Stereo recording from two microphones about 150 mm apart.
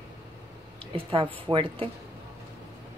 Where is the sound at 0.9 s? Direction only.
35° right (ahead or behind).